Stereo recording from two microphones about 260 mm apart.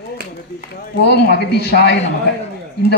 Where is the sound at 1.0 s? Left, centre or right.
Left.